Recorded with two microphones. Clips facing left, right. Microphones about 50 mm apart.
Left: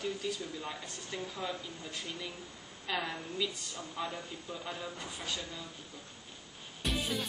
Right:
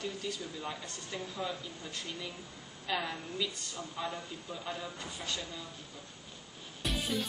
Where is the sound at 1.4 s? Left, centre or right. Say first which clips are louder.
Even; centre.